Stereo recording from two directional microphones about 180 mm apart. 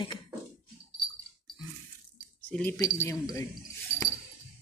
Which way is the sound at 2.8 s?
15° left (ahead or behind).